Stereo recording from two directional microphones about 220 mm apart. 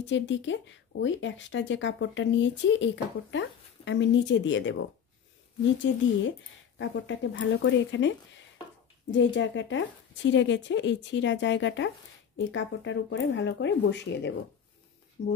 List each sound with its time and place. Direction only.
0.1 s speech: 55° left (ahead or behind)
6.8 s speech: 55° left (ahead or behind)
9.1 s speech: 55° left (ahead or behind)